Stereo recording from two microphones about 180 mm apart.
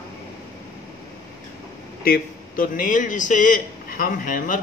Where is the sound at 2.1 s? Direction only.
50° left (ahead or behind).